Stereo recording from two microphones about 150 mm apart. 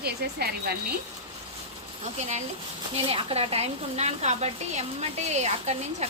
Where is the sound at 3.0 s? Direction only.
40° right (ahead or behind).